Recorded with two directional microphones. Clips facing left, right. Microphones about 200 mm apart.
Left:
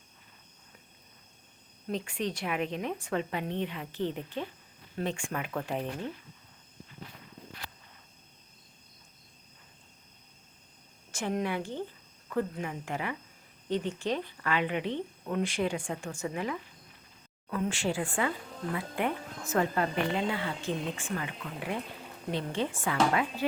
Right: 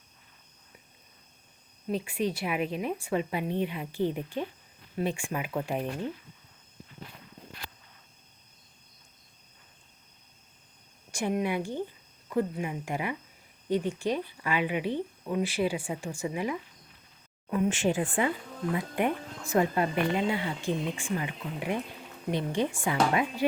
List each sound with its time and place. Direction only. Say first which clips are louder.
1.9 s speech: right 3 dB; 10° right (ahead or behind)
11.1 s speech: right 3 dB; 10° right (ahead or behind)